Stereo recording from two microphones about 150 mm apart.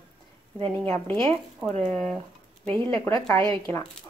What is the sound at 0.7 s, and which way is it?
A woman's voice, 10° left (ahead or behind).